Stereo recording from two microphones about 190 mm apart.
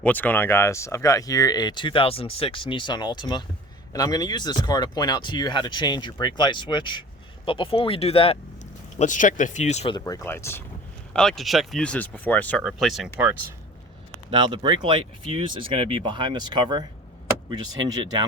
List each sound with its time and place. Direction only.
0.0 s speech: 10° left (ahead or behind); by 8.4 s 30° left (ahead or behind)
9.0 s speech: 40° left (ahead or behind)
9.9 s speech: 15° left (ahead or behind); by 13.1 s centre (ahead or behind)
14.3 s speech: 25° right (ahead or behind)